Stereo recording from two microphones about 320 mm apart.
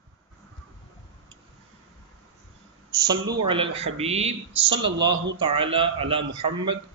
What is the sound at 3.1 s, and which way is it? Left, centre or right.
A man's voice, centre.